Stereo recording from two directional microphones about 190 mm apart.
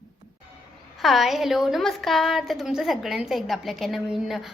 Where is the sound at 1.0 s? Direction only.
Centre (ahead or behind).